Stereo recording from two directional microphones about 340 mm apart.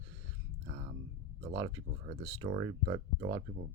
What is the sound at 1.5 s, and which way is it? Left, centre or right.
Speech, right.